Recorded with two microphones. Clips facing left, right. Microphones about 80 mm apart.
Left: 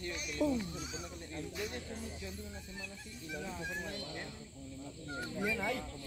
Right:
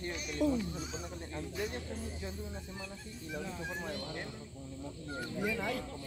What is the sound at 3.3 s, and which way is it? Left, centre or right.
Speech, centre.